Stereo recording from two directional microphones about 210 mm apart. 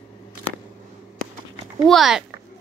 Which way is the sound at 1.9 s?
Centre (ahead or behind).